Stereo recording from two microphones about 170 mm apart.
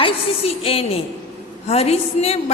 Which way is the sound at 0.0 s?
35° left (ahead or behind).